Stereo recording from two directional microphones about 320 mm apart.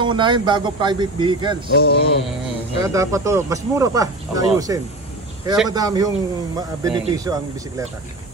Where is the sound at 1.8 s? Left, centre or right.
Left.